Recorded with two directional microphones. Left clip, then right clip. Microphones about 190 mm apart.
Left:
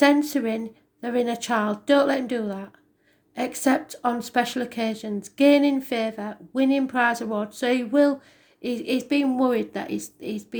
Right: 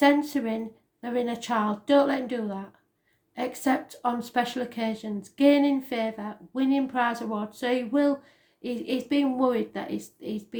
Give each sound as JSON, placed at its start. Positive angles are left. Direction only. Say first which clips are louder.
{"t": 0.0, "sound": "speech", "louder": "left 3 dB", "side_deg": 45}